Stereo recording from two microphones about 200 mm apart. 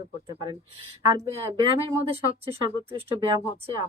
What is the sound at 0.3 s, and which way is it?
A woman's voice, 25° right (ahead or behind).